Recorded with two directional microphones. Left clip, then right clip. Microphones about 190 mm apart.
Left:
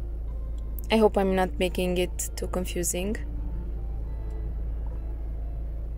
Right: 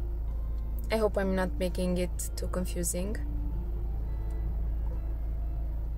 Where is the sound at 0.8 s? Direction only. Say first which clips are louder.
Left 6 dB; 15° left (ahead or behind).